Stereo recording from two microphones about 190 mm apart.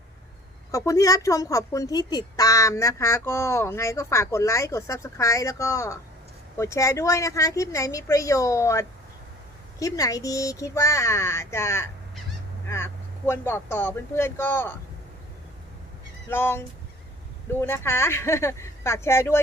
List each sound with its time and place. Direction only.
0.7 s a woman's voice: 15° left (ahead or behind)
16.3 s a woman's voice: 10° left (ahead or behind)